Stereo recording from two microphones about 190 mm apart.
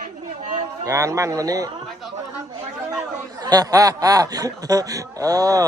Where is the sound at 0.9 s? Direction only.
15° right (ahead or behind).